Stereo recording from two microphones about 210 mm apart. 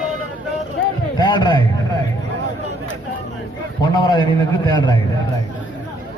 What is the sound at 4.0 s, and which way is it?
Speech, 20° left (ahead or behind).